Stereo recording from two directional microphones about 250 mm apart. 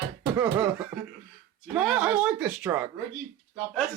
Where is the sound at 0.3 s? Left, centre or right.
Centre.